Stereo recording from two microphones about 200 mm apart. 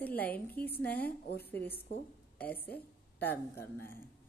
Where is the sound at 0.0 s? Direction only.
10° left (ahead or behind).